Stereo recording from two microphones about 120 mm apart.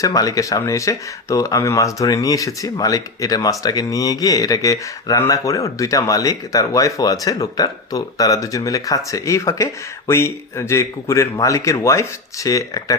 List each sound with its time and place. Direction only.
0.0 s speech: 30° left (ahead or behind)